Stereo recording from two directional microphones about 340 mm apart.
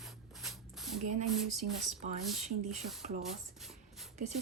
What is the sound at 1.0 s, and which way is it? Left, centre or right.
Speech, centre.